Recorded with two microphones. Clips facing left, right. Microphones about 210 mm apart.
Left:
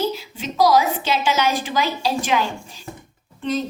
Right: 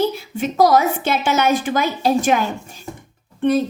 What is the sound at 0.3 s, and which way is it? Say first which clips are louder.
A woman's voice: right 2 dB; 55° right (ahead or behind).